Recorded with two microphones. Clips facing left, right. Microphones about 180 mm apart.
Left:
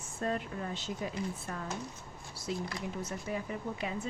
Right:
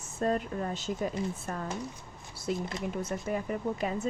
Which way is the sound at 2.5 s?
55° right (ahead or behind).